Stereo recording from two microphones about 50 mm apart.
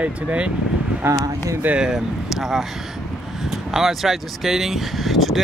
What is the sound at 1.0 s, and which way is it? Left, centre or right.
Speech, right.